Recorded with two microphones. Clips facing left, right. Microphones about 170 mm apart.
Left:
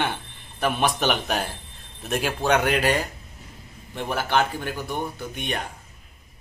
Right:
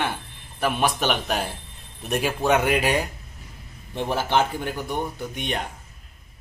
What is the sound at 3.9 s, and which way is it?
Speech, 20° right (ahead or behind).